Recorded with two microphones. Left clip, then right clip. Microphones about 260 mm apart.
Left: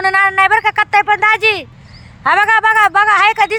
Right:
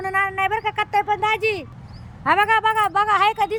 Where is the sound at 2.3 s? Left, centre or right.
Left.